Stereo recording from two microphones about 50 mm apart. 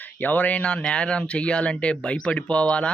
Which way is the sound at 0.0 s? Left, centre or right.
Left.